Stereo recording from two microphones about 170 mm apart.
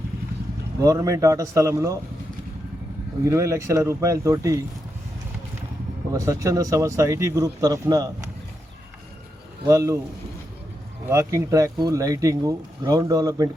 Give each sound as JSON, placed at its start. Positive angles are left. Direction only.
{"t": 0.8, "sound": "speech", "side_deg": -20}
{"t": 3.2, "sound": "speech", "side_deg": -20}
{"t": 6.1, "sound": "speech", "side_deg": -20}
{"t": 9.6, "sound": "speech", "side_deg": -20}
{"t": 11.1, "sound": "speech", "side_deg": -15}